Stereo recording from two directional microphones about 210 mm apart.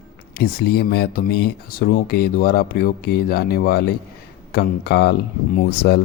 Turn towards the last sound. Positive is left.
turn(degrees=50)  # may be behind; listen again after turning